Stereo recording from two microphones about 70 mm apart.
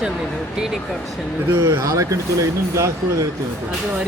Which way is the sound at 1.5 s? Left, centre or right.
Right.